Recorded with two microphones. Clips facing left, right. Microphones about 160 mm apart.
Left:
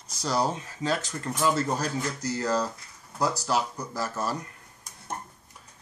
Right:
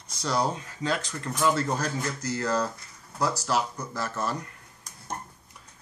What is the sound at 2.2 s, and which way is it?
Speech, 35° left (ahead or behind).